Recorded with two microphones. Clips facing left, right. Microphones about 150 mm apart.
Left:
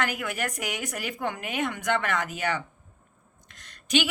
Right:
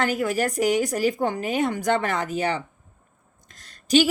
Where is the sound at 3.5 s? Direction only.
35° right (ahead or behind).